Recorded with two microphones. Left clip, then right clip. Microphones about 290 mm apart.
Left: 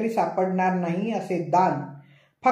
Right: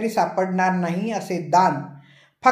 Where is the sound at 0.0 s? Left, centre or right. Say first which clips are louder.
Right 2 dB; right.